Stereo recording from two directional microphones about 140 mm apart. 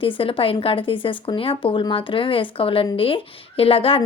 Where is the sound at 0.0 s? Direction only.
40° left (ahead or behind).